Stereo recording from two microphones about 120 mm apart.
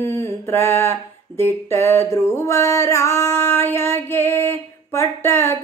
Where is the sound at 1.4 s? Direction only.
20° left (ahead or behind).